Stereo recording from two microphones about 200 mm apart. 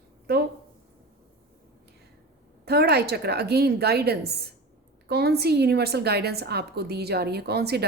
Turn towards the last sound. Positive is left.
turn(degrees=-55)  # may be behind; listen again after turning